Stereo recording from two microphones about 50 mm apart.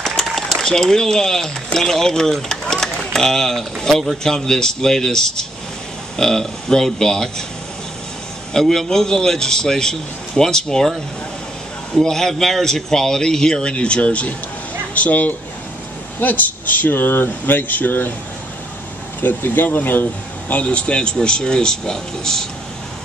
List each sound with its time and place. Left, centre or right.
0.0 s applause: centre
0.6 s speech: centre
8.5 s speech: centre
11.9 s speech: centre; by 18.1 s left
19.2 s speech: left; by 22.5 s centre